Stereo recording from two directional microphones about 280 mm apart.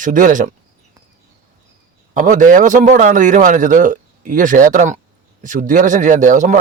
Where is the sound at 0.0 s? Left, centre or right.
Right.